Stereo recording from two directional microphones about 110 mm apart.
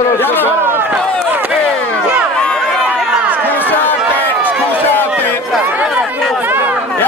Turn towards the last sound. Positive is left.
turn(degrees=-20)  # may be behind; listen again after turning